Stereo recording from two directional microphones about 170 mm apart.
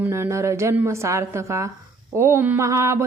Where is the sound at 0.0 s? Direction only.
15° right (ahead or behind).